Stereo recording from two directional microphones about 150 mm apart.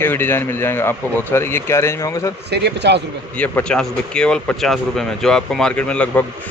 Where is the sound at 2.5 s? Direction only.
90° right.